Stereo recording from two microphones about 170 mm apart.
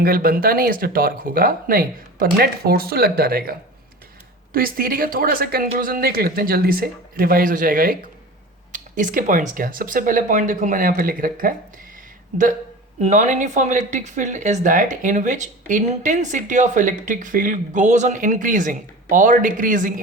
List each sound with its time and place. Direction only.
0.0 s speech: 60° right (ahead or behind)
4.5 s speech: 60° right (ahead or behind)
13.0 s speech: 45° right (ahead or behind)